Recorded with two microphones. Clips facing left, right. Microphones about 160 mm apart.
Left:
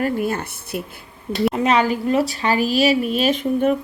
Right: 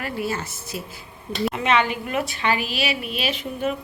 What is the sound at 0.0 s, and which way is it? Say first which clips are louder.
Speech: left 6 dB; 50° left (ahead or behind).